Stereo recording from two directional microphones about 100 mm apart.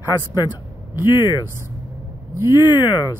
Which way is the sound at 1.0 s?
45° left (ahead or behind).